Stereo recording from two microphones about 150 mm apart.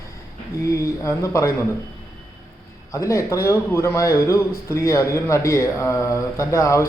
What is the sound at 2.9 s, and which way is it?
Speech, 20° left (ahead or behind).